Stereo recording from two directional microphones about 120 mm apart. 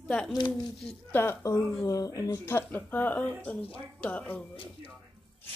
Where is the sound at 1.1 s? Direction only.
20° left (ahead or behind).